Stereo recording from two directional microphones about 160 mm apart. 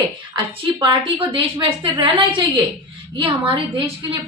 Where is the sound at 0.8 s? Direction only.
30° right (ahead or behind).